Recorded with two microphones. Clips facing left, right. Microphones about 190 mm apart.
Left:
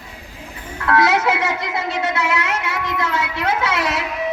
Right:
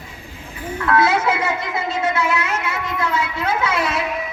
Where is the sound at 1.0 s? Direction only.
75° left (ahead or behind).